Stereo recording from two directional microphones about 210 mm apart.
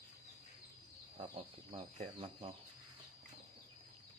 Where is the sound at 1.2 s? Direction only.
30° right (ahead or behind).